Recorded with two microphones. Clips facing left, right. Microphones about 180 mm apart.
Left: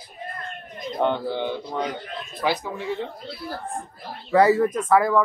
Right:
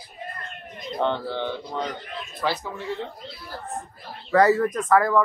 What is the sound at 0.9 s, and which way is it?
Speech, 15° left (ahead or behind).